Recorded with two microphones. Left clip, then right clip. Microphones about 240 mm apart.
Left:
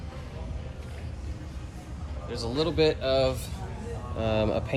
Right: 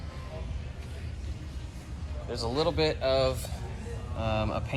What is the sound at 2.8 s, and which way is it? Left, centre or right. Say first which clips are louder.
Speech: left 5 dB; centre.